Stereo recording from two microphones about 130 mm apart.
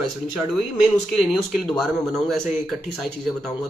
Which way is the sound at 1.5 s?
Centre (ahead or behind).